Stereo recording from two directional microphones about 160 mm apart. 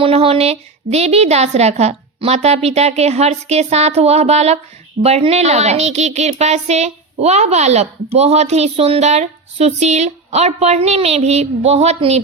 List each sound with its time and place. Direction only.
0.0 s speech: 35° right (ahead or behind)